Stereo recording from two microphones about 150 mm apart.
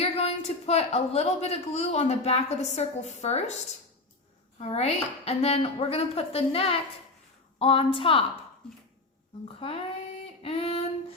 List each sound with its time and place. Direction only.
0.0 s a man's voice: 45° left (ahead or behind)
8.6 s a sound: 5° left (ahead or behind)
9.6 s a woman's voice: 40° left (ahead or behind)